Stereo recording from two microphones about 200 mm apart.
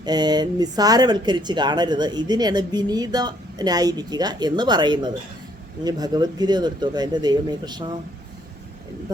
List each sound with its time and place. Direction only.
0.0 s speech: 20° right (ahead or behind)